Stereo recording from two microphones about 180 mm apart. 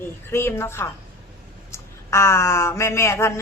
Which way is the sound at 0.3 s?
15° left (ahead or behind).